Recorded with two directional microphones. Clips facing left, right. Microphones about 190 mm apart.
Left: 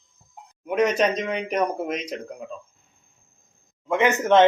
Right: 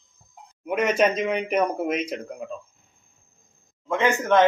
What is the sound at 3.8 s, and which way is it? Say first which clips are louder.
Speech: left 2 dB; 15° left (ahead or behind).